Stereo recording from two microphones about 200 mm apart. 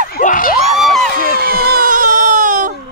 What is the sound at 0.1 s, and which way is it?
Crowd, 45° left (ahead or behind).